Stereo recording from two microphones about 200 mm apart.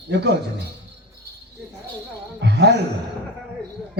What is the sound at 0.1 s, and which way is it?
Speech, 60° right (ahead or behind).